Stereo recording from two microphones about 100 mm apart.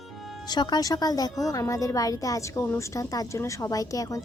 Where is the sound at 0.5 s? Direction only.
45° left (ahead or behind).